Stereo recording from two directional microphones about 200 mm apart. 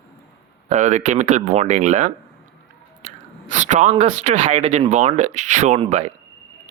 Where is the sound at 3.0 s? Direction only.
35° right (ahead or behind).